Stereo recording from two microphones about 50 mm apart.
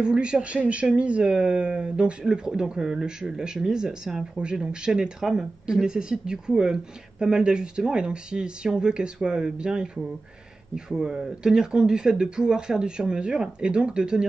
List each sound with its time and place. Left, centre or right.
0.0 s speech: centre